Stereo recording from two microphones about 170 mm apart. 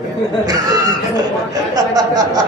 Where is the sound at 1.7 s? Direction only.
20° right (ahead or behind).